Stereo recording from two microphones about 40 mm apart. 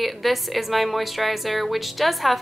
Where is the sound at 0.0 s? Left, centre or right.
Centre.